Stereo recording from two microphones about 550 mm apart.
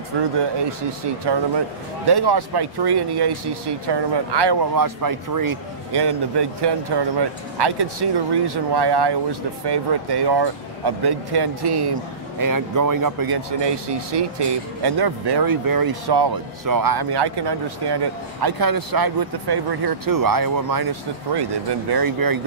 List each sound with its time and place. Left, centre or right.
0.4 s speech: right